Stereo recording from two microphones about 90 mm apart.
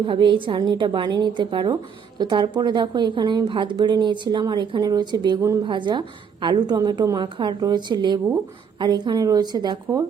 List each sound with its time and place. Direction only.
0.0 s a woman's voice: 65° right (ahead or behind); by 7.2 s 45° right (ahead or behind)
7.2 s a woman's voice: 60° right (ahead or behind)